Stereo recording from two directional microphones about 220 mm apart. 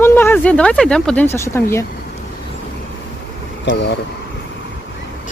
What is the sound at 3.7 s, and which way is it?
Speech, 55° left (ahead or behind).